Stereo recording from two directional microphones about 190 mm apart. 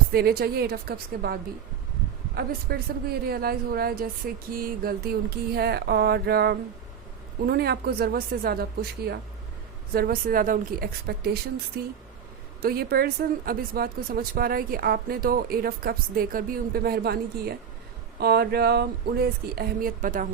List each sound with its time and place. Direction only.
0.1 s speech: 55° right (ahead or behind)